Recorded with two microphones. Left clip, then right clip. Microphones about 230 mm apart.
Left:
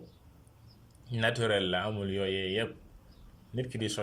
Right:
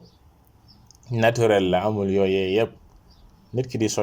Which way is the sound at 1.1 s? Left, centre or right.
Right.